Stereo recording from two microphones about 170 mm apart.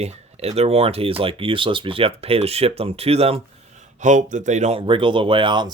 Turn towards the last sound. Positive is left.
turn(degrees=-25)  # may be behind; listen again after turning